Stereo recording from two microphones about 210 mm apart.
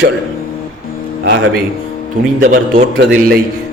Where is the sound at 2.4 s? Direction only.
40° right (ahead or behind).